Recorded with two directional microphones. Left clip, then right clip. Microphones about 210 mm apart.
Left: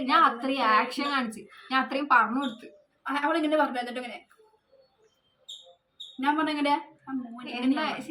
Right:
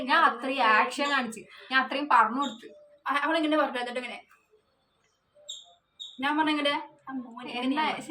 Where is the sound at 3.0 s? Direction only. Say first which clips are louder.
Even; 20° right (ahead or behind).